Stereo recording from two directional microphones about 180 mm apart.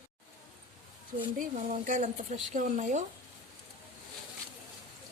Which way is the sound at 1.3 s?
40° right (ahead or behind).